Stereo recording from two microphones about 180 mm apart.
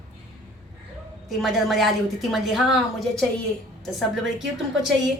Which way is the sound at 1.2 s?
Centre (ahead or behind).